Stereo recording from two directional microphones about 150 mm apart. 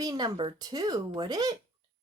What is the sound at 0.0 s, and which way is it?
Speech, 25° right (ahead or behind).